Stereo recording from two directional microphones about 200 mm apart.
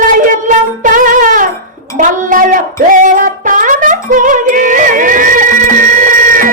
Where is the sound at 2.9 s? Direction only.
40° right (ahead or behind).